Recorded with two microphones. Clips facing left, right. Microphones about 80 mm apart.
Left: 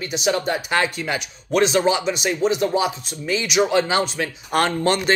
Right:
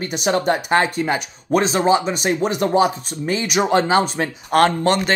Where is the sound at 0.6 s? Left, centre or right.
Right.